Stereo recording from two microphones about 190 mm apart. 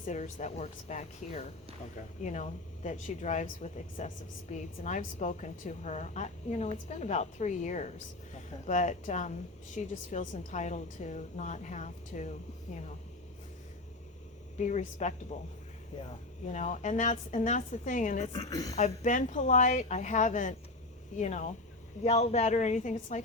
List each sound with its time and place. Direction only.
0.0 s a woman's voice: 40° left (ahead or behind)
14.6 s a woman's voice: 40° left (ahead or behind)
16.5 s a woman's voice: 40° left (ahead or behind)
18.3 s a woman's voice: 20° left (ahead or behind)
18.8 s a woman's voice: 40° left (ahead or behind)